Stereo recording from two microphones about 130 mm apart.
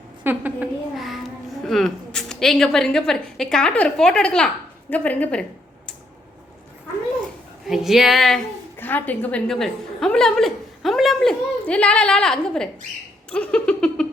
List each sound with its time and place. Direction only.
0.3 s a woman's voice: 15° right (ahead or behind)
0.9 s a woman's voice: centre (ahead or behind)
7.6 s a woman's voice: 5° right (ahead or behind)
8.7 s a woman's voice: 15° left (ahead or behind)
13.3 s a sound: 10° left (ahead or behind)